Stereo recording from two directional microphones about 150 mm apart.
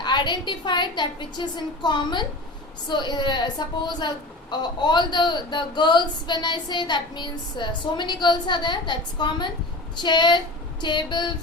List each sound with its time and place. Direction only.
0.0 s a woman's voice: 30° left (ahead or behind)